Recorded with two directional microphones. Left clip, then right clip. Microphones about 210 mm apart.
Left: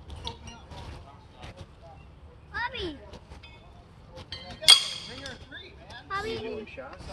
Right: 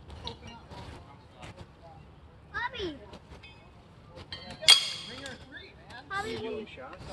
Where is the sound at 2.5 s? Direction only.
50° left (ahead or behind).